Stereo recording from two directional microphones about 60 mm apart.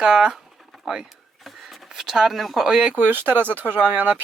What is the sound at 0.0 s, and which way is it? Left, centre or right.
Speech, centre.